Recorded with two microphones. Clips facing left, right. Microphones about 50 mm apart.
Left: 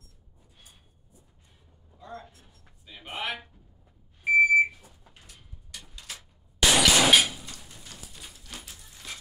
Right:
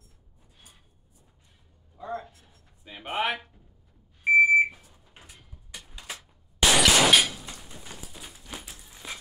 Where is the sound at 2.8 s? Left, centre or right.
Right.